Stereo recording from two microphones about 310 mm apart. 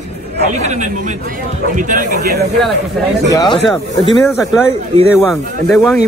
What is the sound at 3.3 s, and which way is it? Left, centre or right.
Speech, centre.